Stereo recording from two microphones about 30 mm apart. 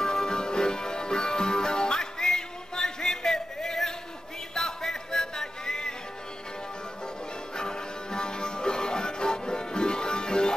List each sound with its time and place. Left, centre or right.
0.0 s music: left
7.5 s music: left